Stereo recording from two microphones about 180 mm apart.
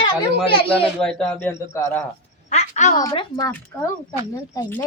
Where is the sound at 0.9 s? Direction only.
5° left (ahead or behind).